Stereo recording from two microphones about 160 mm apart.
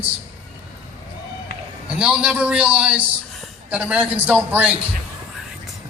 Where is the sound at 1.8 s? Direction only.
5° right (ahead or behind).